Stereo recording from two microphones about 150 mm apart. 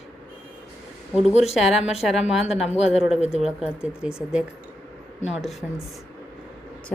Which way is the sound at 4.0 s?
5° right (ahead or behind).